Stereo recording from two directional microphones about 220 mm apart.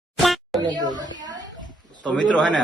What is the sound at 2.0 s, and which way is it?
Speech, 5° left (ahead or behind).